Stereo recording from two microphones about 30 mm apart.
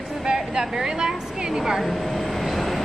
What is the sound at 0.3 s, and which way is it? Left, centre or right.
Speech, right.